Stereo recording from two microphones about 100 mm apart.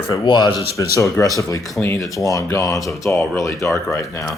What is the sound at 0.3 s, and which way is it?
Speech, 45° left (ahead or behind).